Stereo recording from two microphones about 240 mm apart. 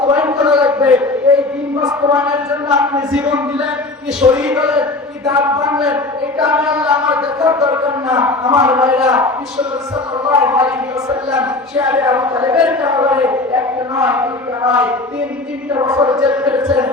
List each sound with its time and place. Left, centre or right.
0.0 s a sound: centre
1.8 s speech: centre
5.7 s speech: centre
16.2 s speech: centre